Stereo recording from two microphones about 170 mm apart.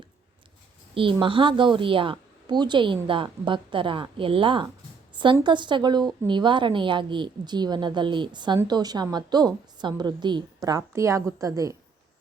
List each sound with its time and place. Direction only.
0.9 s a woman's voice: 30° right (ahead or behind)